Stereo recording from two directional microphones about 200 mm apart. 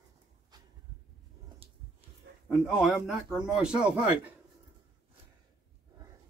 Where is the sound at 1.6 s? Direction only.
30° right (ahead or behind).